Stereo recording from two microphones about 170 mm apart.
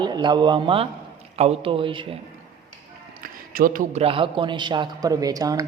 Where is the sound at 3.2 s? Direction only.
55° right (ahead or behind).